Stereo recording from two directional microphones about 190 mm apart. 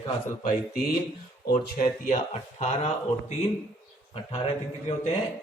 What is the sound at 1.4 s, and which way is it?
Speech, 55° left (ahead or behind).